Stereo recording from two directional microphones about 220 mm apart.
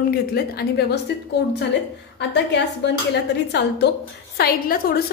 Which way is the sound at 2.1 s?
50° left (ahead or behind).